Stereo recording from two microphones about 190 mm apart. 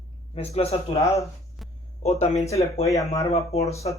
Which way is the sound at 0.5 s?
30° left (ahead or behind).